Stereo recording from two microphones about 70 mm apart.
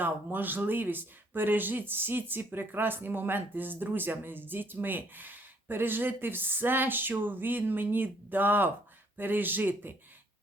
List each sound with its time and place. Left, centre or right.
0.0 s speech: right